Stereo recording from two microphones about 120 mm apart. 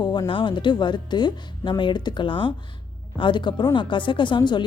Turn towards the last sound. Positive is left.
turn(degrees=40)  # may be behind; listen again after turning